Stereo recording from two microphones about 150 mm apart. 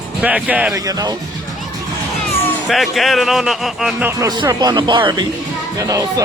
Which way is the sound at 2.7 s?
Centre (ahead or behind).